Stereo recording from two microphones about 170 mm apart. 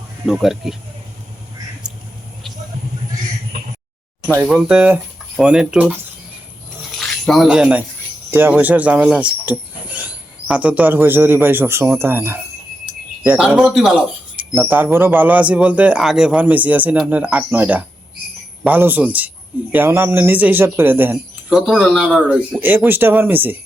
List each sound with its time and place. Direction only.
0.3 s speech: centre (ahead or behind)
4.3 s speech: 10° right (ahead or behind)
7.0 s speech: centre (ahead or behind)
21.7 s speech: centre (ahead or behind)